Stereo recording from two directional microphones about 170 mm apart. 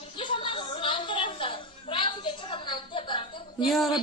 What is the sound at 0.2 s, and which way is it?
Music, 30° left (ahead or behind).